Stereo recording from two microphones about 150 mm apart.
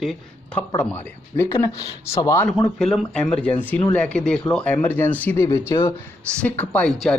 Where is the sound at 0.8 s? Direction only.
15° left (ahead or behind).